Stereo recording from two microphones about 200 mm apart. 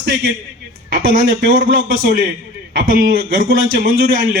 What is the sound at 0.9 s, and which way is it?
A man's voice, 45° right (ahead or behind).